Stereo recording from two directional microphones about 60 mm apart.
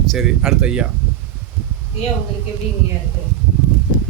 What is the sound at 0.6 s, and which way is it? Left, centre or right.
Speech, centre.